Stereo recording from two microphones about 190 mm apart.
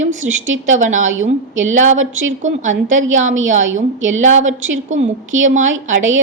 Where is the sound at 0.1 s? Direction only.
90° right.